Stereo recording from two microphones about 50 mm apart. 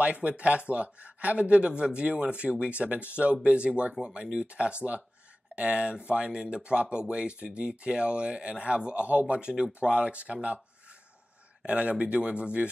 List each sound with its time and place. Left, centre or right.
0.0 s speech: right